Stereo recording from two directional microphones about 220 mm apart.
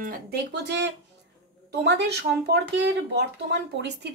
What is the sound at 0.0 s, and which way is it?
Speech, 45° right (ahead or behind).